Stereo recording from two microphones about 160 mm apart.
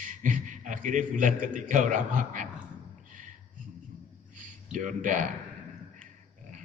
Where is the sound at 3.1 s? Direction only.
55° right (ahead or behind).